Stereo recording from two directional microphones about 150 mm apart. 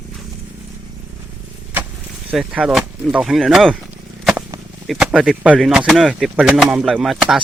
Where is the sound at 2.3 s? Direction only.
5° right (ahead or behind).